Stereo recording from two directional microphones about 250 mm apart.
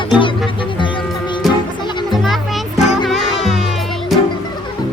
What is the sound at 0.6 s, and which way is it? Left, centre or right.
Music, centre.